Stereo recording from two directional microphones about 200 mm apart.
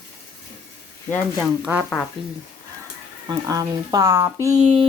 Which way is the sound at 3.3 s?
20° right (ahead or behind).